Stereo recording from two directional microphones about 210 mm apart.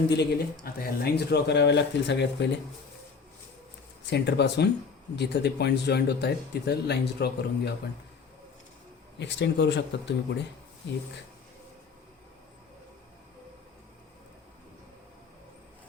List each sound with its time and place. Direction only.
0.1 s speech: 50° left (ahead or behind)
4.0 s speech: 55° left (ahead or behind)
9.1 s speech: 55° left (ahead or behind)